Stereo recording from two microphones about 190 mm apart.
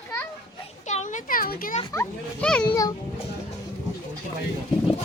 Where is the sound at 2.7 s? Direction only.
20° left (ahead or behind).